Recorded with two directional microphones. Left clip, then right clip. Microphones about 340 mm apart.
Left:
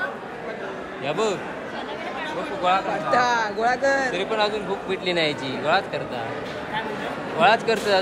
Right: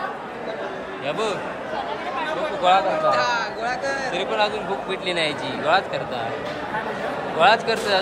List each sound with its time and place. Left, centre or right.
1.0 s a man's voice: centre
2.7 s a man's voice: centre
3.1 s a man's voice: centre
4.1 s a man's voice: centre
7.3 s speech: centre